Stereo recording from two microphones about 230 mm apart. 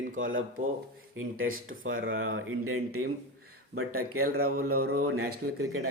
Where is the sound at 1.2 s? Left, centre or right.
Right.